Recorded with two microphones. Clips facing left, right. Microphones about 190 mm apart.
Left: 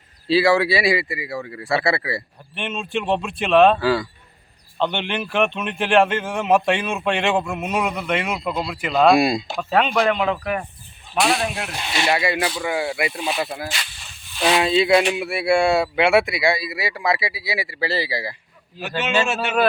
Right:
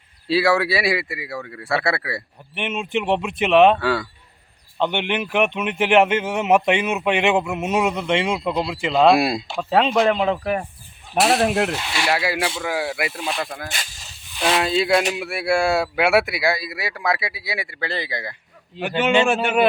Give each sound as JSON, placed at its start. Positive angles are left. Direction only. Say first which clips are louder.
{"t": 0.3, "sound": "speech", "louder": "left 2 dB", "side_deg": 0}
{"t": 2.6, "sound": "a man's voice", "louder": "right 2 dB", "side_deg": -20}
{"t": 3.8, "sound": "speech", "louder": "left 2 dB", "side_deg": 0}
{"t": 4.8, "sound": "a man's voice", "louder": "right 1 dB", "side_deg": -15}
{"t": 9.0, "sound": "speech", "louder": "left 1 dB", "side_deg": 0}
{"t": 9.6, "sound": "a man's voice", "louder": "right 3 dB", "side_deg": -25}
{"t": 11.2, "sound": "speech", "louder": "right 4 dB", "side_deg": 0}
{"t": 18.8, "sound": "speech", "louder": "right 4 dB", "side_deg": -15}